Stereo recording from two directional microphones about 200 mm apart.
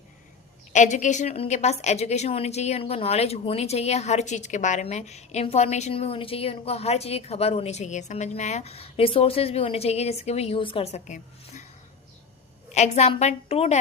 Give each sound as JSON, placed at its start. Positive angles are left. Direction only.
{"t": 0.7, "sound": "a woman's voice", "side_deg": 35}
{"t": 12.7, "sound": "a woman's voice", "side_deg": 35}